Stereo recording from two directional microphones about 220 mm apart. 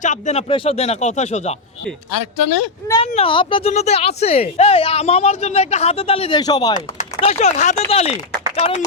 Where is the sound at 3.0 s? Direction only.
25° left (ahead or behind).